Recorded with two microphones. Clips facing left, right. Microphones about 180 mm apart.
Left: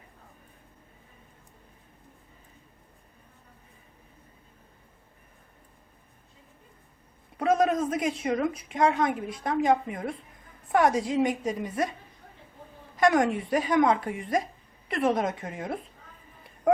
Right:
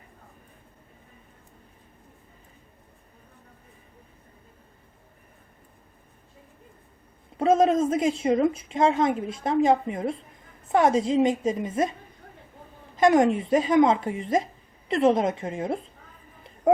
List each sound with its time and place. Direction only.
7.3 s a woman's voice: 25° right (ahead or behind)
13.0 s a woman's voice: 25° right (ahead or behind)